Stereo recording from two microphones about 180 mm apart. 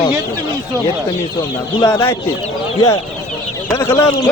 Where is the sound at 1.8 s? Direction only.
20° left (ahead or behind).